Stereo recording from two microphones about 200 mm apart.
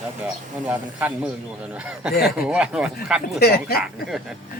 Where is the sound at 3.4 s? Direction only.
50° left (ahead or behind).